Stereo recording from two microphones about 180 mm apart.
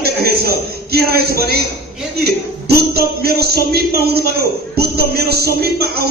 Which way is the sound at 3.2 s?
60° right (ahead or behind).